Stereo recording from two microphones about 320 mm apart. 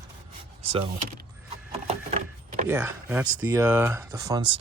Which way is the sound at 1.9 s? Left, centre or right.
Right.